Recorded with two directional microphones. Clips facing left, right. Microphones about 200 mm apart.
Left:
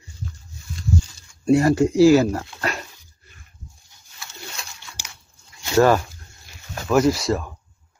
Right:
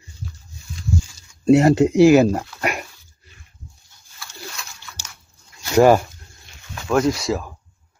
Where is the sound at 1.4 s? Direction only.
25° right (ahead or behind).